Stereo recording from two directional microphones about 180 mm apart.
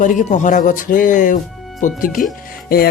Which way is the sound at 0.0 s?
45° left (ahead or behind).